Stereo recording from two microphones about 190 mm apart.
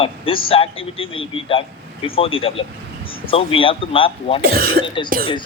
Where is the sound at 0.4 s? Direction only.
30° left (ahead or behind).